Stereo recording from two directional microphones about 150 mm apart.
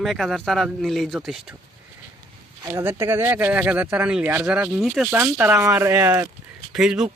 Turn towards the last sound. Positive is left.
turn(degrees=-5)  # may be behind; listen again after turning